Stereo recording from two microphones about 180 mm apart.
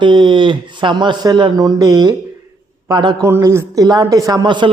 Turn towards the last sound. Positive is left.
turn(degrees=-25)  # may be behind; listen again after turning